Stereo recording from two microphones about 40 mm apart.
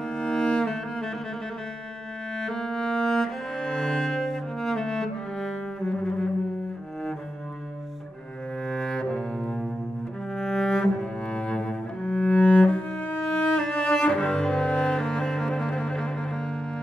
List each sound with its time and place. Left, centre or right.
0.0 s music: centre
2.3 s cello: centre
8.6 s cello: centre
13.0 s music: left
13.5 s cello: left